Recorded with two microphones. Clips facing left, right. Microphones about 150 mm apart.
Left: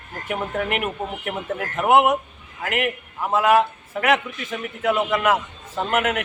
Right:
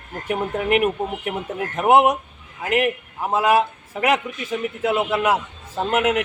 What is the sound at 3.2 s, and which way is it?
A man's voice, 15° right (ahead or behind).